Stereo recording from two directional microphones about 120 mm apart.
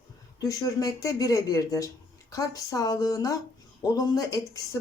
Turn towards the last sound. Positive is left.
turn(degrees=30)  # may be behind; listen again after turning